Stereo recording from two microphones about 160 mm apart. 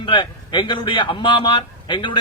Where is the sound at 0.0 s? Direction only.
30° left (ahead or behind).